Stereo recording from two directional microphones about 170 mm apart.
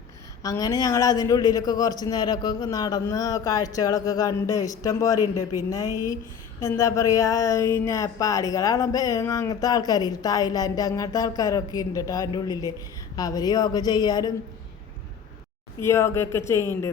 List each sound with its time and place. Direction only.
0.4 s speech: 20° left (ahead or behind)
15.8 s speech: 15° left (ahead or behind)